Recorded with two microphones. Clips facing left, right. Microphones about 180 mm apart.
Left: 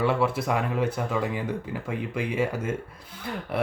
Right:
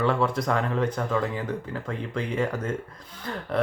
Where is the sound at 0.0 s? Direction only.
10° left (ahead or behind).